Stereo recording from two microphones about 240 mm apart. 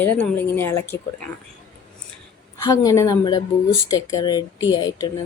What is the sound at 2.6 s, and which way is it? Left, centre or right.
A woman's voice, centre.